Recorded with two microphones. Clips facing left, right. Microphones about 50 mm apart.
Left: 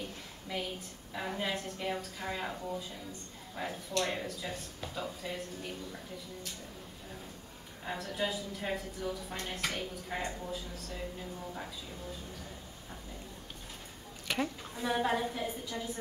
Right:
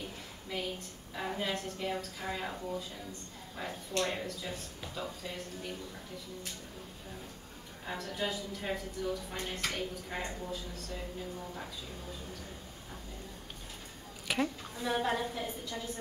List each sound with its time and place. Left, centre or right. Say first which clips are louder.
1.1 s a woman's voice: even; centre
7.8 s speech: left 1 dB; centre
14.2 s a sound: right 1 dB; centre
14.8 s speech: left 1 dB; centre